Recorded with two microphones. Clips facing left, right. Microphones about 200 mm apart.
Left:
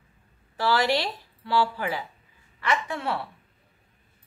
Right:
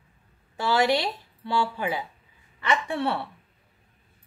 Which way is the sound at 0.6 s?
20° right (ahead or behind).